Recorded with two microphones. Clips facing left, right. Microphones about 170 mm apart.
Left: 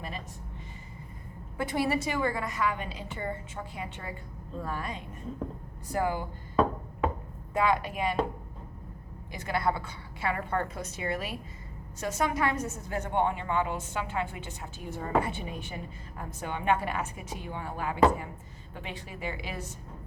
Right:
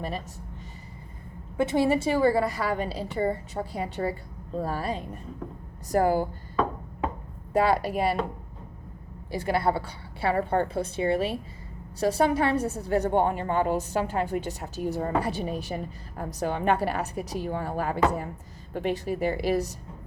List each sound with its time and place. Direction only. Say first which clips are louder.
1.5 s a woman's voice: right 6 dB; 25° right (ahead or behind)
7.5 s a woman's voice: right 4 dB; 35° right (ahead or behind)
9.3 s a woman's voice: right 5 dB; 30° right (ahead or behind)